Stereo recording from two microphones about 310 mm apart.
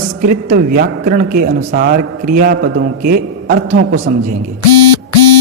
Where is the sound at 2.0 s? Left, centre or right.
Right.